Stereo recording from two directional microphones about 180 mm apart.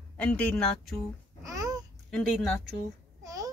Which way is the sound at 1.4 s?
20° right (ahead or behind).